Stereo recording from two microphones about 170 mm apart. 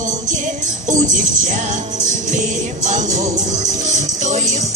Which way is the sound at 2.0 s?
45° right (ahead or behind).